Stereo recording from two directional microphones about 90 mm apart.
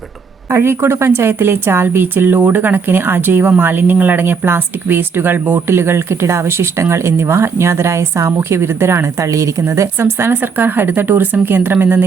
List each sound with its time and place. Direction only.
0.5 s speech: 25° right (ahead or behind)